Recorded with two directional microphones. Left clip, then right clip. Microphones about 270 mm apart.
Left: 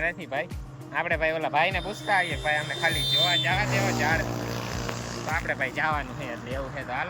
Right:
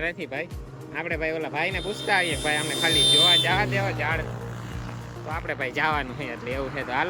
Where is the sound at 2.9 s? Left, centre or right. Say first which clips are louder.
Right 8 dB; right.